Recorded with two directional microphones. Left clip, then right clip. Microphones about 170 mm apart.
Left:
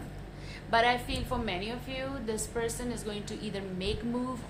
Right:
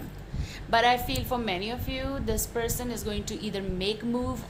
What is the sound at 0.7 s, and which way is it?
A woman's voice, 35° right (ahead or behind).